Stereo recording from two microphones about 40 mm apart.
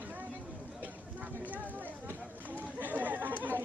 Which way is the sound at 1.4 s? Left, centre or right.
Right.